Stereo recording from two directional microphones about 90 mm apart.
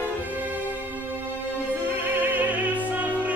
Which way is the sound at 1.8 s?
20° right (ahead or behind).